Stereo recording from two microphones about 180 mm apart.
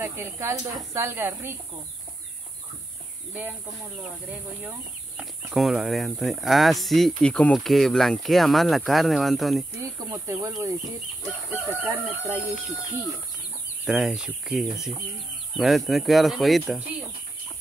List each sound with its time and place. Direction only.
0.0 s speech: 15° right (ahead or behind)
4.3 s speech: 5° right (ahead or behind)
9.8 s speech: 20° right (ahead or behind)
11.8 s speech: 10° right (ahead or behind)
13.8 s speech: 5° right (ahead or behind)